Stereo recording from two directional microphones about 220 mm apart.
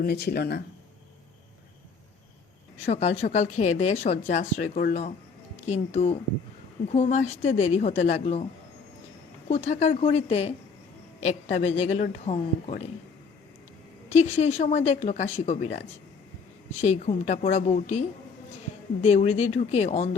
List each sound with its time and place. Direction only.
0.0 s speech: 45° left (ahead or behind)
2.7 s speech: 30° left (ahead or behind)
9.5 s speech: 30° left (ahead or behind)
14.1 s speech: 30° left (ahead or behind)
16.8 s speech: 30° left (ahead or behind)
19.0 s speech: 30° left (ahead or behind)